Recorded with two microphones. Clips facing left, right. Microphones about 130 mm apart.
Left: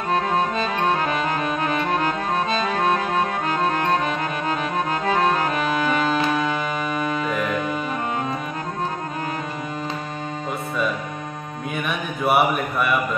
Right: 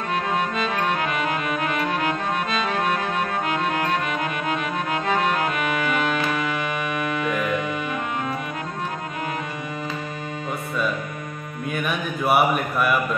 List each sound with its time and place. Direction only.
0.1 s music: 35° left (ahead or behind)
11.7 s mantra: centre (ahead or behind)